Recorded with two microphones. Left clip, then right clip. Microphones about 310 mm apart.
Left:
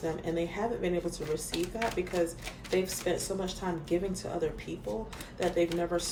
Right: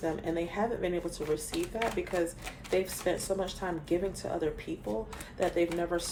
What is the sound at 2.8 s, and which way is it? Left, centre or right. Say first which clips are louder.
Speech: even; right.